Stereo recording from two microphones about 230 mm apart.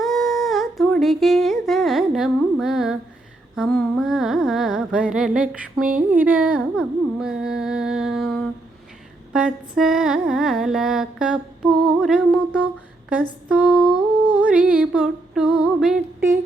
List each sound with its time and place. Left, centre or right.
0.0 s humming: centre
3.5 s carnatic music: centre
5.9 s a sound: right
6.1 s carnatic music: centre
13.5 s humming: centre